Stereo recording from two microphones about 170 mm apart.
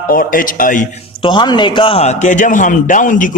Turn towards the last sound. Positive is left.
turn(degrees=50)  # may be behind; listen again after turning